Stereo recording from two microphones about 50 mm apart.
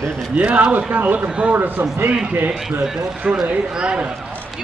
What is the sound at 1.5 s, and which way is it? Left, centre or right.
Speech, right.